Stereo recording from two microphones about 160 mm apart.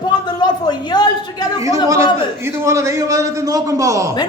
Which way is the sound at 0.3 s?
25° left (ahead or behind).